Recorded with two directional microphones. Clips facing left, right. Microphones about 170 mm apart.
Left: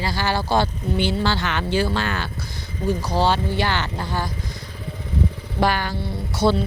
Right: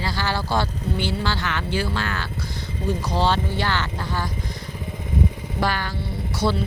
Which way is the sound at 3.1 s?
5° left (ahead or behind).